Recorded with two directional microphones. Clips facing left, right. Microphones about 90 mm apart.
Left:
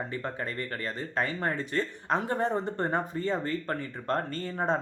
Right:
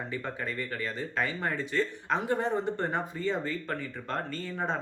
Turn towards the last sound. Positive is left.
turn(degrees=45)  # may be behind; listen again after turning